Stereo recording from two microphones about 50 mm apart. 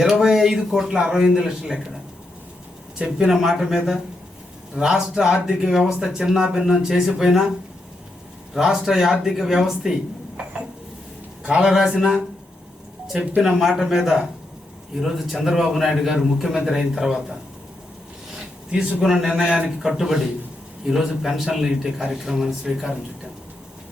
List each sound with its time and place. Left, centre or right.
0.0 s speech: centre
3.2 s speech: centre
4.7 s speech: centre
8.5 s speech: centre
11.4 s speech: centre
13.4 s a man's voice: centre
18.9 s speech: centre